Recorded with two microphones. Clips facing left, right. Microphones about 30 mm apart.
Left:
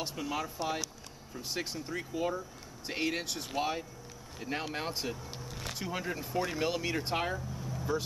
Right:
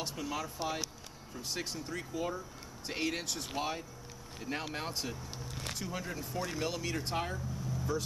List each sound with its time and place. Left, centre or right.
0.0 s speech: centre